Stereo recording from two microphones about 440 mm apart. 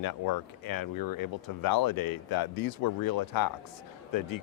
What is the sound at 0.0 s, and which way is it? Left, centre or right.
Speech, left.